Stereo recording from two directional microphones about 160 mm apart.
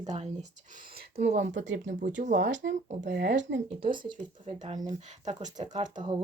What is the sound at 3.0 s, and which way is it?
Speech, 65° right (ahead or behind).